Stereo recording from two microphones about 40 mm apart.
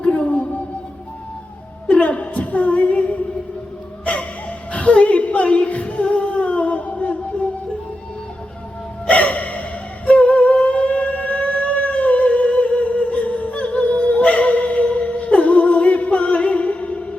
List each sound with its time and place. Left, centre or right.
0.0 s music: left
1.9 s a sound: left
4.0 s music: left
4.7 s a sound: left
5.6 s music: left
9.0 s music: left